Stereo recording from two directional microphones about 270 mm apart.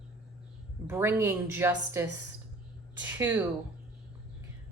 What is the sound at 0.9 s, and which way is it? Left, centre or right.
Speech, centre.